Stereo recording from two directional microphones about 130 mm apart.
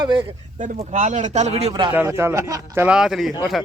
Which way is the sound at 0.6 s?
70° right (ahead or behind).